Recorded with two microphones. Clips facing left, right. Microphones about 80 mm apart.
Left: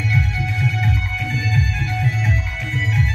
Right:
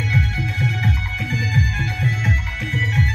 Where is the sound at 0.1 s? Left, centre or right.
Right.